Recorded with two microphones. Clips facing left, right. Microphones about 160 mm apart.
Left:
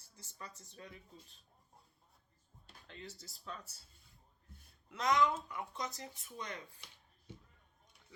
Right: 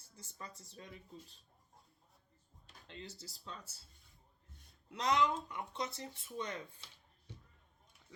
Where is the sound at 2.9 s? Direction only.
30° right (ahead or behind).